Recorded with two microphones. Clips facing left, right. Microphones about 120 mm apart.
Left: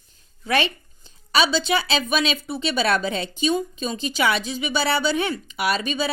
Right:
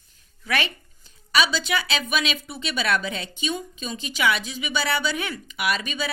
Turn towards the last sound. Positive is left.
turn(degrees=35)  # may be behind; listen again after turning